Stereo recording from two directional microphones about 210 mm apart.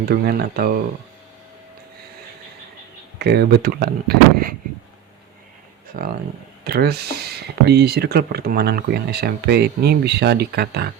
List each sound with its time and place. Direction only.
0.0 s speech: 45° right (ahead or behind)
3.2 s speech: 50° right (ahead or behind)
5.9 s speech: 40° right (ahead or behind)